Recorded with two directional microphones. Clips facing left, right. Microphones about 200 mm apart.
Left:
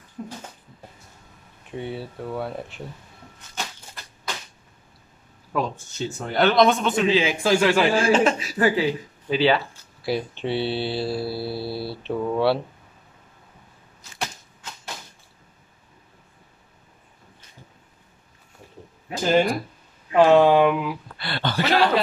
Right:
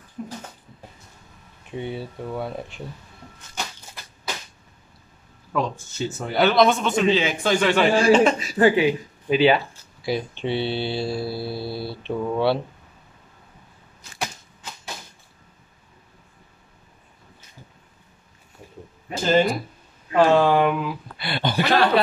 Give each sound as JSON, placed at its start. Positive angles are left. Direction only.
{"t": 1.8, "sound": "a man's voice", "side_deg": 0}
{"t": 5.5, "sound": "a man's voice", "side_deg": 0}
{"t": 8.5, "sound": "speech", "side_deg": -25}
{"t": 10.0, "sound": "a man's voice", "side_deg": 5}
{"t": 14.1, "sound": "a sound", "side_deg": -5}
{"t": 19.0, "sound": "speech", "side_deg": 15}
{"t": 21.2, "sound": "speech", "side_deg": -15}